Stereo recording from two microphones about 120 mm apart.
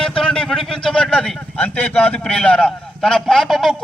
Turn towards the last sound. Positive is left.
turn(degrees=0)  # may be behind; listen again after turning